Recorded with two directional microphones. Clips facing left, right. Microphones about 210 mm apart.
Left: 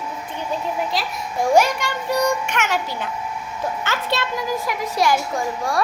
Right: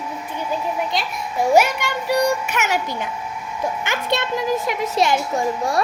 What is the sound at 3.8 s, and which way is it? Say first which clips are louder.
Music: right 1 dB; 15° right (ahead or behind).